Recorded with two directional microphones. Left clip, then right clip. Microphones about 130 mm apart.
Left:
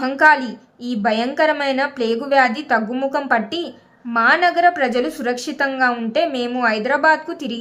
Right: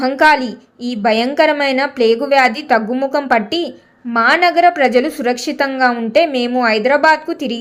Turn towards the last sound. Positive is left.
turn(degrees=-25)  # may be behind; listen again after turning